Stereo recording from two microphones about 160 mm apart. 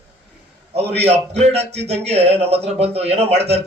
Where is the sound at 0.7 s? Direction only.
40° right (ahead or behind).